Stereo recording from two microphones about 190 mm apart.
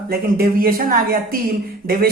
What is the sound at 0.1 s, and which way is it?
Speech, 50° right (ahead or behind).